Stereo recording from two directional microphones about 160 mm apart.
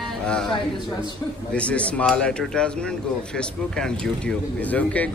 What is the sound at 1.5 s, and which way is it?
Speech, 5° left (ahead or behind).